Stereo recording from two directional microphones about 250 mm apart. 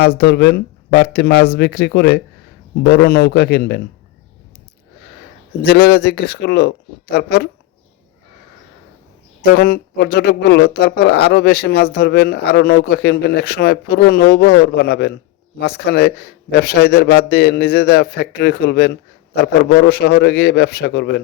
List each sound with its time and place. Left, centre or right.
0.0 s speech: left
5.6 s speech: left
9.4 s speech: left